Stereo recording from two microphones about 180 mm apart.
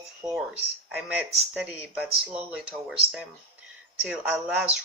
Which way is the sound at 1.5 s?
5° right (ahead or behind).